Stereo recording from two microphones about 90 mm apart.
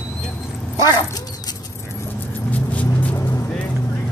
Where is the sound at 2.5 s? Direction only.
15° left (ahead or behind).